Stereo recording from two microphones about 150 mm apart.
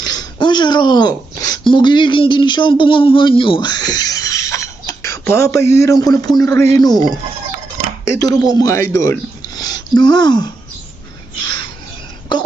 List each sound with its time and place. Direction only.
0.0 s speech: 25° left (ahead or behind)